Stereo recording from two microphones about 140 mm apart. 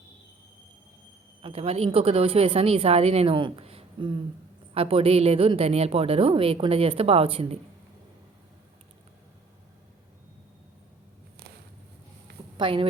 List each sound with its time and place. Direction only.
1.4 s a woman's voice: 45° right (ahead or behind)
12.5 s speech: 35° right (ahead or behind)